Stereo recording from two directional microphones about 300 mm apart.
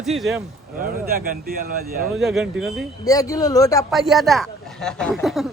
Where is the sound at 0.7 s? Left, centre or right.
Right.